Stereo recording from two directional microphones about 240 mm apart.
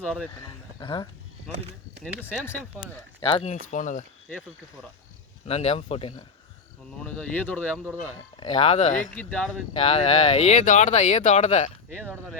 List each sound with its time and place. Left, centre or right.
0.8 s speech: centre
2.4 s speech: centre
3.2 s speech: left
5.5 s speech: left
7.0 s speech: centre
8.4 s speech: left
9.1 s speech: centre
9.7 s speech: left